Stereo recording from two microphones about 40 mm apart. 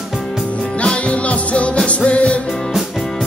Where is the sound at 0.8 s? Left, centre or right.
Left.